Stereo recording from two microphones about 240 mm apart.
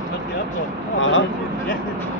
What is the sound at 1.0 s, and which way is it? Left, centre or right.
Speech, left.